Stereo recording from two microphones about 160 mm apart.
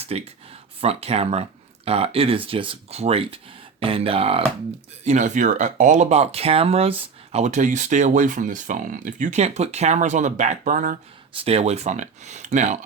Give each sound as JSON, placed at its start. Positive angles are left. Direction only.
{"t": 0.0, "sound": "speech", "side_deg": -40}
{"t": 5.0, "sound": "speech", "side_deg": -50}
{"t": 11.4, "sound": "speech", "side_deg": -40}